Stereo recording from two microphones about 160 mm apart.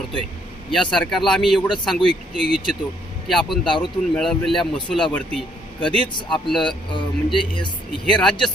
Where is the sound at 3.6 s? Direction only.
30° left (ahead or behind).